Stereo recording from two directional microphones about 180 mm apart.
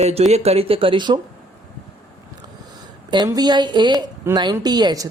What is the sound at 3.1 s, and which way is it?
Speech, 25° right (ahead or behind).